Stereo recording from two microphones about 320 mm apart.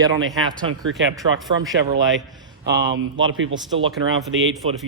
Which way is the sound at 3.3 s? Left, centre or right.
Right.